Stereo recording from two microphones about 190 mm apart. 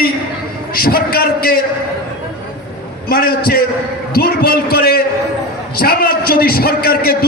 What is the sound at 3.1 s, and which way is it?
A man's voice, 50° left (ahead or behind).